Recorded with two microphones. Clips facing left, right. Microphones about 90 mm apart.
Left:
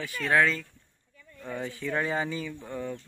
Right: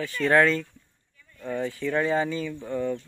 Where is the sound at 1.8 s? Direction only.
15° left (ahead or behind).